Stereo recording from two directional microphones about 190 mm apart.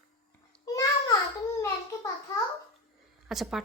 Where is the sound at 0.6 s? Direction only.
20° left (ahead or behind).